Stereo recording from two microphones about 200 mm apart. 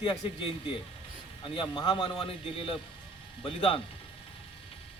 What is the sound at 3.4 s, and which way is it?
Speech, 25° left (ahead or behind).